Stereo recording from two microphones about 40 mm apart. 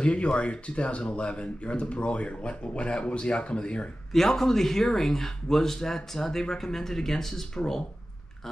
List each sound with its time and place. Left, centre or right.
0.0 s speech: left
4.1 s speech: centre